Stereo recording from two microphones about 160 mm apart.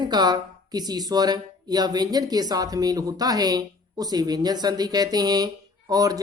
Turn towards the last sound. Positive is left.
turn(degrees=-25)  # may be behind; listen again after turning